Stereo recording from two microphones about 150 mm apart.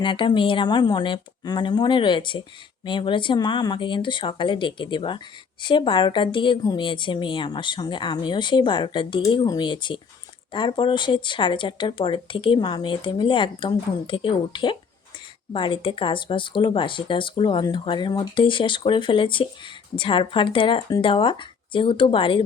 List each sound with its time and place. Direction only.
0.0 s a woman's voice: 30° left (ahead or behind)